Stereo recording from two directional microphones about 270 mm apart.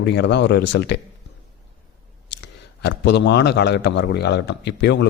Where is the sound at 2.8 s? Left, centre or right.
Left.